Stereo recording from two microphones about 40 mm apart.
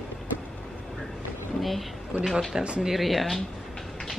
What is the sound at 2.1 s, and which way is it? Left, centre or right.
Speech, right.